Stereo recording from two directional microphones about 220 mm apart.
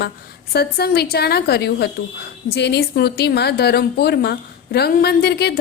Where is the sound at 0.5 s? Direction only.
45° left (ahead or behind).